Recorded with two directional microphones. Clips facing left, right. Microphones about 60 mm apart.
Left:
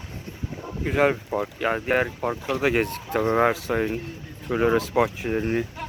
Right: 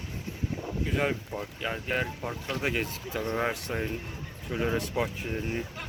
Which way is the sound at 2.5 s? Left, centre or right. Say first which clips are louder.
Left 8 dB; left.